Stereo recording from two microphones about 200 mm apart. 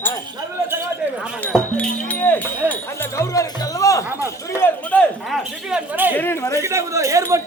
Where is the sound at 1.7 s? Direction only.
10° left (ahead or behind); by 6.1 s 5° right (ahead or behind).